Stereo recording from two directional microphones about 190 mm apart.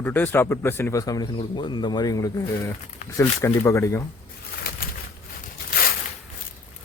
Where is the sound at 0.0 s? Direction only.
10° left (ahead or behind).